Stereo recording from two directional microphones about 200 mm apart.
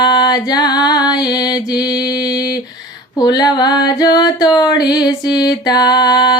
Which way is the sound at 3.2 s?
20° left (ahead or behind).